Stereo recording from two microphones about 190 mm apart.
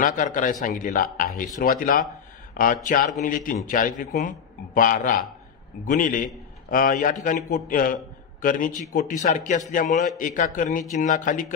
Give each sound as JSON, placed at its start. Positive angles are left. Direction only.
{"t": 0.0, "sound": "a man's voice", "side_deg": 45}